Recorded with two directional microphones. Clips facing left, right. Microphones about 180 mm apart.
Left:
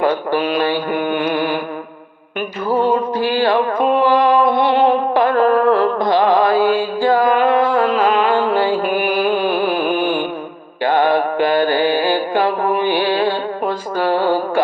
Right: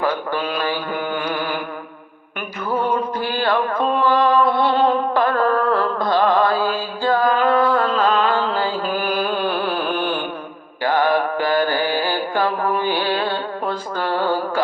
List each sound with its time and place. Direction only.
0.9 s mantra: 20° left (ahead or behind)
2.6 s music: 25° left (ahead or behind)
7.9 s a sound: 10° left (ahead or behind)
10.8 s mantra: 20° left (ahead or behind)